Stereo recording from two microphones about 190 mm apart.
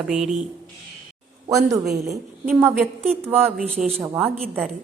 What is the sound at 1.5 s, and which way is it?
A woman's voice, 15° right (ahead or behind).